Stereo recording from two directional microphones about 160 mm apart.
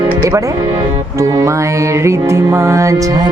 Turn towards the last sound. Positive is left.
turn(degrees=-20)  # may be behind; listen again after turning